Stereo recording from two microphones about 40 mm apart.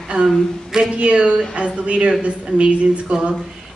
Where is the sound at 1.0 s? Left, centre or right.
Right.